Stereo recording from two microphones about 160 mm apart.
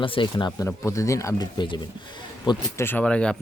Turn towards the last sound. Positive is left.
turn(degrees=5)  # may be behind; listen again after turning